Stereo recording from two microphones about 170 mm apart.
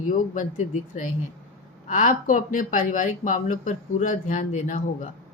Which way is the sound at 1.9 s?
45° left (ahead or behind).